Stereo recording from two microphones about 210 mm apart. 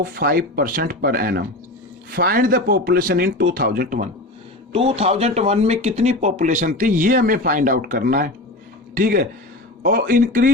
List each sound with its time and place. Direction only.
0.0 s speech: 45° right (ahead or behind)
4.7 s speech: 25° right (ahead or behind)